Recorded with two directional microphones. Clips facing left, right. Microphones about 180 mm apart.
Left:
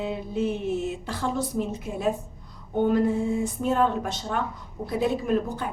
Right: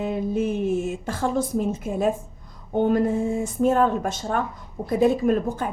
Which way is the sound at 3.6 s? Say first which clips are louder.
Right 5 dB; 45° right (ahead or behind).